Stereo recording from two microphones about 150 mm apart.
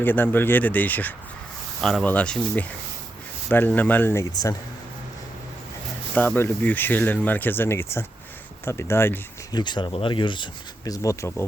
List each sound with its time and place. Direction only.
0.0 s speech: 15° left (ahead or behind)
6.1 s speech: 10° left (ahead or behind)
9.5 s speech: 30° left (ahead or behind)